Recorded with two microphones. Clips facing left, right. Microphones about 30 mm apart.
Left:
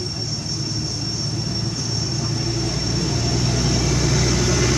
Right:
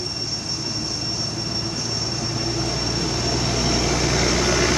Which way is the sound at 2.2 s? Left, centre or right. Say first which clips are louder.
Even; centre.